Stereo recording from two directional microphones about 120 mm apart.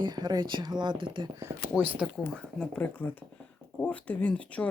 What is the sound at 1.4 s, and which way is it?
Speech, 20° right (ahead or behind).